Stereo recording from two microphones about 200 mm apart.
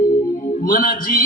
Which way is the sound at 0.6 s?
45° left (ahead or behind).